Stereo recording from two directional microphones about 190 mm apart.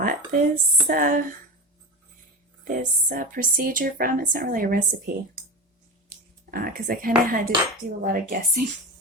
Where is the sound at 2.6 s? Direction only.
45° right (ahead or behind).